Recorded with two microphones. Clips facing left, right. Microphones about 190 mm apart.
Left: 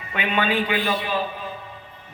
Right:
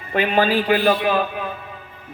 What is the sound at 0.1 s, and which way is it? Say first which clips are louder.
Speech: right 5 dB; 35° right (ahead or behind).